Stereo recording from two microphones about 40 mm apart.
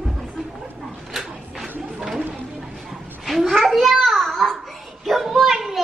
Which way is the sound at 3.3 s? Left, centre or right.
Centre.